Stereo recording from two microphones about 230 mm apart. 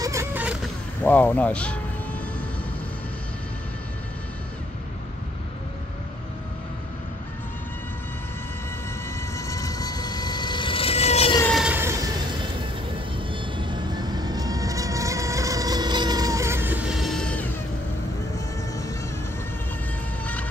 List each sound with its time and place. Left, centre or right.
0.0 s vehicle: centre
1.0 s speech: centre
9.5 s a sound: centre
11.4 s train: centre
13.3 s vehicle: right; by 17.5 s centre